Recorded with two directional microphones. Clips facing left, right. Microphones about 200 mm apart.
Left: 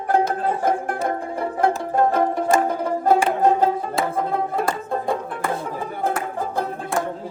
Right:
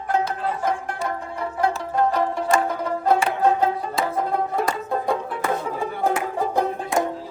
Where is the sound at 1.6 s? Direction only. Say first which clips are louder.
Left 2 dB; 50° left (ahead or behind).